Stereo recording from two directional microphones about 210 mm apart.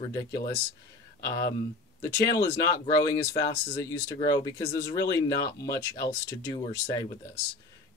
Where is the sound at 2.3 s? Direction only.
15° left (ahead or behind).